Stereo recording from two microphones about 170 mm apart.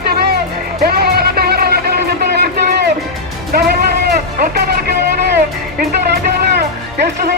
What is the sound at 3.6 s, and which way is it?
Music, 65° right (ahead or behind).